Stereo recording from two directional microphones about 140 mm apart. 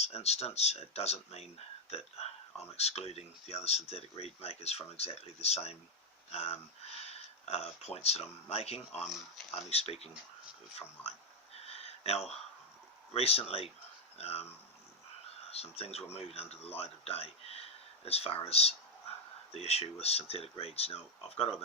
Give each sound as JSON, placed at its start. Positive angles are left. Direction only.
{"t": 0.0, "sound": "speech", "side_deg": 50}
{"t": 11.5, "sound": "a sound", "side_deg": 45}
{"t": 13.1, "sound": "speech", "side_deg": 45}
{"t": 15.4, "sound": "speech", "side_deg": 45}